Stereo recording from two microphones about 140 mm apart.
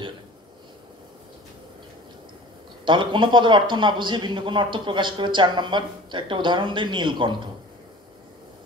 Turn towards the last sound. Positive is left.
turn(degrees=-35)  # may be behind; listen again after turning